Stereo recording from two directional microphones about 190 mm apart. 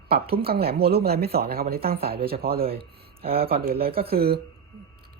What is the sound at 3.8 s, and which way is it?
Speech, 55° right (ahead or behind).